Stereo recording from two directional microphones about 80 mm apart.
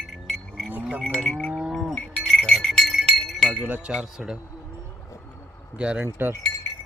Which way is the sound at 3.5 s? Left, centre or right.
Centre.